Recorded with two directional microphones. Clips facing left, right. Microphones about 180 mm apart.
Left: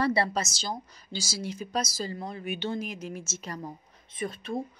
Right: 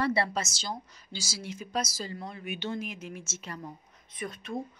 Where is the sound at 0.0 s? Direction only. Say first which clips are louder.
Left 2 dB; 35° left (ahead or behind).